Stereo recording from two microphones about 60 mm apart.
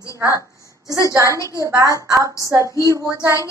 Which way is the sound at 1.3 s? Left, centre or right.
Left.